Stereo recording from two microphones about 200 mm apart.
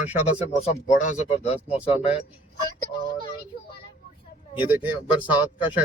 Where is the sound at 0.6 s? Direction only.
35° left (ahead or behind).